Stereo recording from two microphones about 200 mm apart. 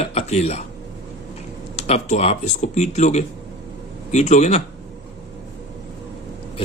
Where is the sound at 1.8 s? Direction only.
35° left (ahead or behind).